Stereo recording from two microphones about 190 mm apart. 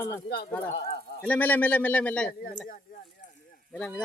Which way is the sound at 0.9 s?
55° left (ahead or behind).